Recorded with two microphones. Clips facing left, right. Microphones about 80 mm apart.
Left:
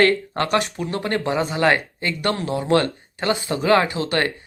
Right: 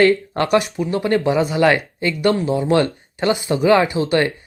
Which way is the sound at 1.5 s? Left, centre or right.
Left.